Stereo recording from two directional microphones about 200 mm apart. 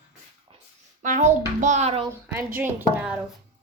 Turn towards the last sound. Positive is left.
turn(degrees=-5)  # may be behind; listen again after turning